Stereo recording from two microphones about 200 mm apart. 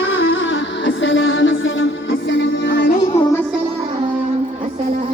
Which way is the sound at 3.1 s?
15° left (ahead or behind).